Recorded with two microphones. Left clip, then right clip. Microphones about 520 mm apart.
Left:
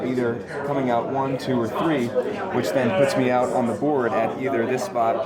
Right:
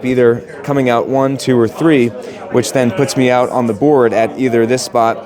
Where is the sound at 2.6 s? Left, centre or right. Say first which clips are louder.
Right 7 dB; right.